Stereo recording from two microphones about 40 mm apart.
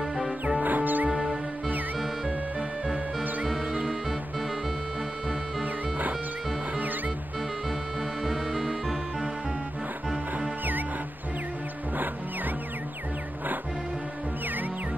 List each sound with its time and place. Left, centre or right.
0.6 s music: right
1.1 s music: centre
8.2 s music: centre